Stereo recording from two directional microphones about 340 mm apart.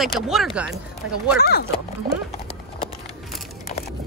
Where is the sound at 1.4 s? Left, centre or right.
Left.